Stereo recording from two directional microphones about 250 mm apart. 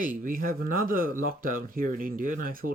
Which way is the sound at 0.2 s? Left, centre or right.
Right.